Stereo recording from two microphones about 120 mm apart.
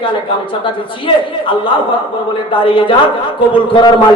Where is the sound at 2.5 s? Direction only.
45° left (ahead or behind).